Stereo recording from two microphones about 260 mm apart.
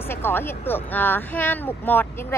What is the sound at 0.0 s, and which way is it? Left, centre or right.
Speech, centre.